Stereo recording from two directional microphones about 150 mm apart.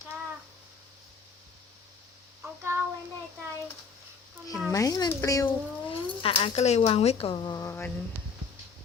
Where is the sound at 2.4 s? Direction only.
15° right (ahead or behind).